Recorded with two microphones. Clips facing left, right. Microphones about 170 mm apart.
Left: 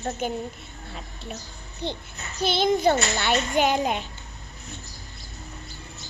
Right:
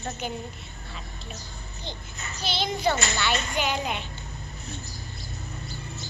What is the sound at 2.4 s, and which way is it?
A woman's voice, 50° left (ahead or behind).